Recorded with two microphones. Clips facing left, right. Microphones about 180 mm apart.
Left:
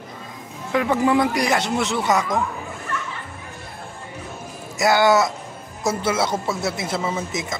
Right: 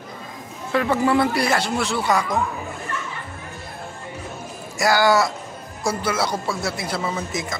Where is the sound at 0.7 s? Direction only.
15° left (ahead or behind).